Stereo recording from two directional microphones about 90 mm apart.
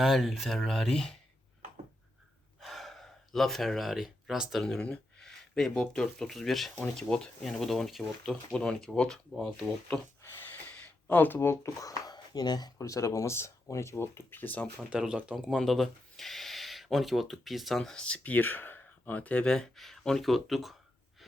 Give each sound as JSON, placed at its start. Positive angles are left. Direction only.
{"t": 0.0, "sound": "speech", "side_deg": 0}
{"t": 2.6, "sound": "speech", "side_deg": 0}
{"t": 10.7, "sound": "speech", "side_deg": 20}
{"t": 14.8, "sound": "speech", "side_deg": -10}
{"t": 15.4, "sound": "speech", "side_deg": 5}
{"t": 19.5, "sound": "speech", "side_deg": 5}